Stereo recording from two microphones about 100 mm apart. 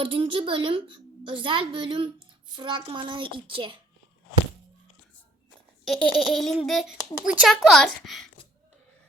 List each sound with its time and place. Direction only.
0.0 s a woman's voice: 60° right (ahead or behind)
5.8 s speech: 5° left (ahead or behind)